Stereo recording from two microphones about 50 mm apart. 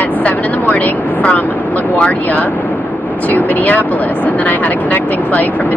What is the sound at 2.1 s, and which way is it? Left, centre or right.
Speech, left.